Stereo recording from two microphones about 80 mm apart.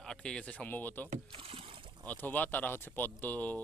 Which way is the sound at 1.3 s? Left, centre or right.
Right.